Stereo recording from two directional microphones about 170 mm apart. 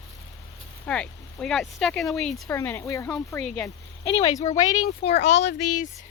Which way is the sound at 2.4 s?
15° left (ahead or behind).